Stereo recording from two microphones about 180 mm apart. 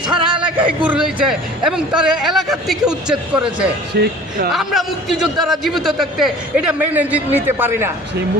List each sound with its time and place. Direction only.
0.3 s a man's voice: 5° right (ahead or behind)
3.9 s speech: 65° right (ahead or behind)
4.5 s a man's voice: centre (ahead or behind)